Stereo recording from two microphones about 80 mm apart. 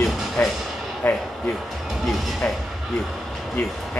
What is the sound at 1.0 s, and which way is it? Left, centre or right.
Speech, left.